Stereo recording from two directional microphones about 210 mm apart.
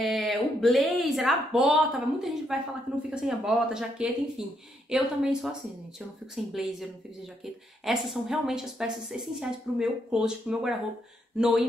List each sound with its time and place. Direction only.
0.0 s a woman's voice: centre (ahead or behind)